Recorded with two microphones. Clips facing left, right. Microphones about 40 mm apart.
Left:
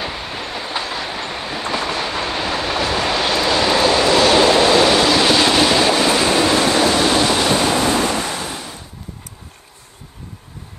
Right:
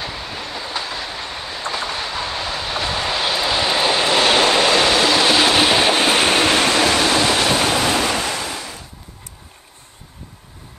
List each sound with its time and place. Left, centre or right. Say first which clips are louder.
0.0 s train: left 2 dB; centre
3.2 s vehicle: left 2 dB; centre
4.6 s vehicle: left 2 dB; centre
5.9 s train: even; right
7.0 s waterfall: left 1 dB; centre
7.7 s waves: left 1 dB; right
8.5 s a sound: even; left